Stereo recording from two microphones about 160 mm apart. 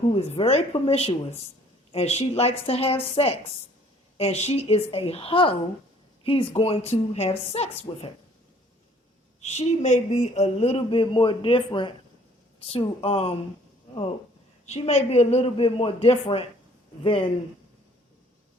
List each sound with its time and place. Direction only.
0.1 s speech: 40° left (ahead or behind)
9.4 s speech: 45° left (ahead or behind)
14.7 s speech: 40° left (ahead or behind)